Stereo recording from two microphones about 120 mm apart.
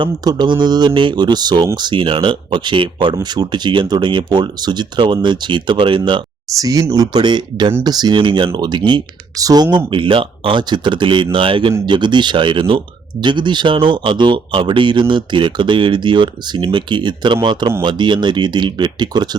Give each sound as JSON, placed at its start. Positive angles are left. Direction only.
{"t": 0.0, "sound": "speech", "side_deg": -40}
{"t": 6.6, "sound": "speech", "side_deg": -30}